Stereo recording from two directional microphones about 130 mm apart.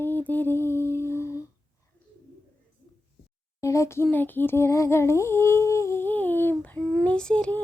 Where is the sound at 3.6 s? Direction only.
25° left (ahead or behind).